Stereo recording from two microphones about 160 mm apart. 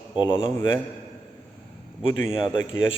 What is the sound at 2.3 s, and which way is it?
Speech, 30° left (ahead or behind).